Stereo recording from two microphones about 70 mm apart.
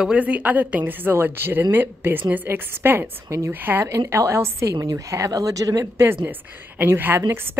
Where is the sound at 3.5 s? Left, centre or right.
Right.